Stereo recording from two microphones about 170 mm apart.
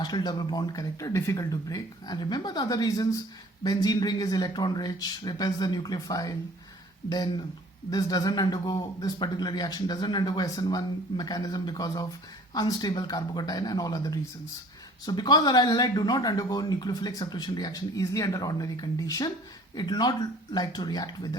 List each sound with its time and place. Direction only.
0.0 s speech: 25° left (ahead or behind)
7.9 s speech: 20° left (ahead or behind)